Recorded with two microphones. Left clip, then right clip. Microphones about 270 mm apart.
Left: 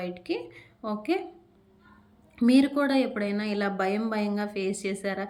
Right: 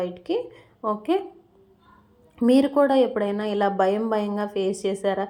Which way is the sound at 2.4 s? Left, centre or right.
Centre.